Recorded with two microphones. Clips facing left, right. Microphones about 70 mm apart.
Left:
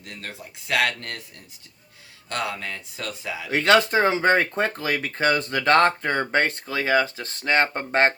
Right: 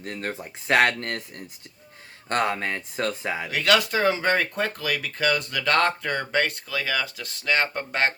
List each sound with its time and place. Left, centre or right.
0.0 s speech: right
3.5 s speech: left